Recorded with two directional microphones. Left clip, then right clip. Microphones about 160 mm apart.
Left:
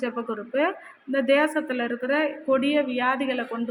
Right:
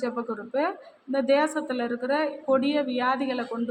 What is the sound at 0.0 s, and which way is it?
Speech, 15° left (ahead or behind).